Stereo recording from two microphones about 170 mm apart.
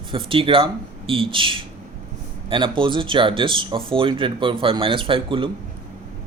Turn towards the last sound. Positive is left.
turn(degrees=-30)  # may be behind; listen again after turning